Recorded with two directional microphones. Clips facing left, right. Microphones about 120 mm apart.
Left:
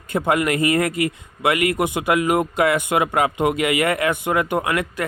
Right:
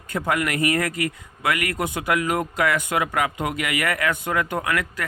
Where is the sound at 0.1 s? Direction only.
25° left (ahead or behind).